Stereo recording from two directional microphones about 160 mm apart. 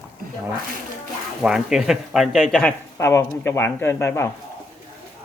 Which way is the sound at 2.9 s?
15° left (ahead or behind).